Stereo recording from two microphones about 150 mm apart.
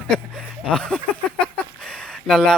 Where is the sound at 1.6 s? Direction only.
10° left (ahead or behind).